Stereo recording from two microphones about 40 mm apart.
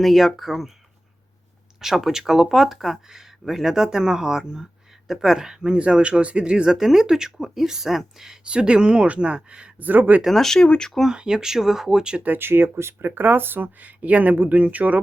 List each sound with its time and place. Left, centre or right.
0.0 s speech: centre
1.8 s speech: centre; by 6.7 s right
6.7 s speech: centre
8.4 s speech: right
9.7 s speech: right
10.2 s speech: centre
10.7 s speech: centre
11.1 s speech: centre
12.4 s speech: right
13.1 s speech: right
13.7 s speech: right